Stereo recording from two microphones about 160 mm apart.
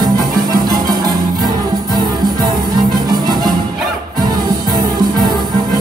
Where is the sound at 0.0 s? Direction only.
25° right (ahead or behind).